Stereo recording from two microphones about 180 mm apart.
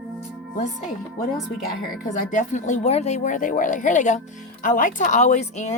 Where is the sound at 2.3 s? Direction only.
45° left (ahead or behind).